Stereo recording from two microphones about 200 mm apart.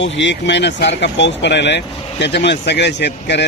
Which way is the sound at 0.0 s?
65° left (ahead or behind).